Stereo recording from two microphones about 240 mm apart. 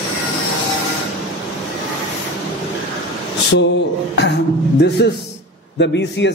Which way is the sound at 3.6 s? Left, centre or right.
Left.